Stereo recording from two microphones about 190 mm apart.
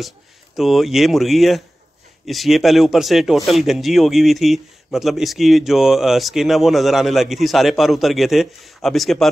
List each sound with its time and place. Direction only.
0.6 s speech: centre (ahead or behind)